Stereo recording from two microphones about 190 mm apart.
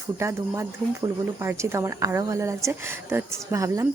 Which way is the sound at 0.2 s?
15° right (ahead or behind).